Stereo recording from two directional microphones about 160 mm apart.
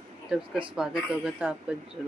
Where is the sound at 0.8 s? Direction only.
5° right (ahead or behind).